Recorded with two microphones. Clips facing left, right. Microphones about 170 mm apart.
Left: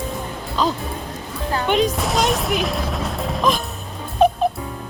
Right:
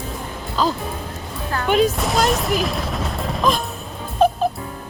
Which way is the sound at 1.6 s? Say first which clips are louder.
Right 2 dB; 5° right (ahead or behind).